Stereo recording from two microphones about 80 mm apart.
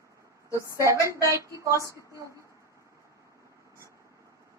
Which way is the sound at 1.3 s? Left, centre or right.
Right.